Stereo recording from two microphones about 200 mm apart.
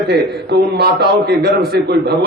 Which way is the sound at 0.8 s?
55° right (ahead or behind).